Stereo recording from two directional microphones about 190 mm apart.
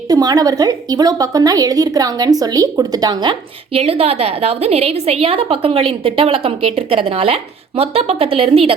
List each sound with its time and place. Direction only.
0.1 s a woman's voice: 20° right (ahead or behind)